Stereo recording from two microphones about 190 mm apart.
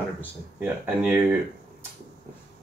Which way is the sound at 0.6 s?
10° right (ahead or behind).